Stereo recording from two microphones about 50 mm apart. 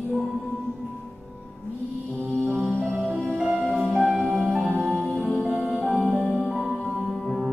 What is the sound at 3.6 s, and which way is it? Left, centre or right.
Music, centre.